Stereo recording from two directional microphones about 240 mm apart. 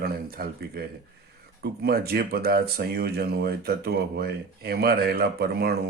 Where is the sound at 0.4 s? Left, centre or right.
Right.